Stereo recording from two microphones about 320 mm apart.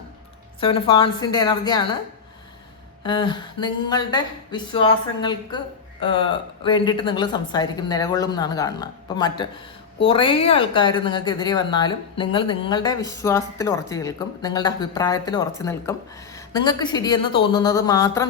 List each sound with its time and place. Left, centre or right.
0.6 s a woman's voice: centre
3.0 s a woman's voice: centre